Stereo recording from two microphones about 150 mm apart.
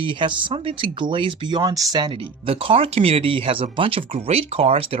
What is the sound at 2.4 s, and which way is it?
Speech, 40° right (ahead or behind).